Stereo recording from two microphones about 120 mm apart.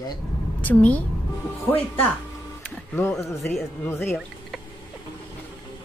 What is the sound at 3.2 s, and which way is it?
Speech, 5° left (ahead or behind).